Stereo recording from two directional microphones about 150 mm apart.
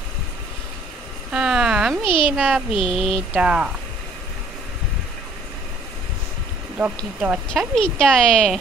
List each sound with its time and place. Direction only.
1.3 s speech: 5° right (ahead or behind)
2.0 s speech: 35° left (ahead or behind)
2.3 s a woman's voice: 5° right (ahead or behind)
7.0 s a woman's voice: 5° right (ahead or behind)